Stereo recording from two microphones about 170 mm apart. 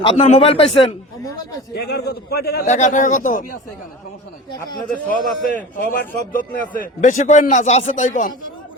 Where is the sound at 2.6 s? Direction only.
45° left (ahead or behind).